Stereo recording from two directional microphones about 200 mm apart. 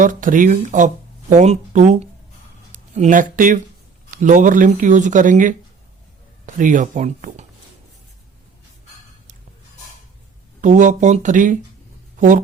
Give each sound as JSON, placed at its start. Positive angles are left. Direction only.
{"t": 0.0, "sound": "speech", "side_deg": -40}
{"t": 10.6, "sound": "speech", "side_deg": -40}
{"t": 12.1, "sound": "a sound", "side_deg": -40}